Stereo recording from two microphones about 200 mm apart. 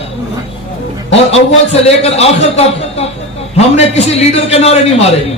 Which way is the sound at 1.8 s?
30° left (ahead or behind).